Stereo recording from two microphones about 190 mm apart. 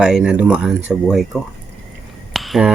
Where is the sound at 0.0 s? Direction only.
5° right (ahead or behind).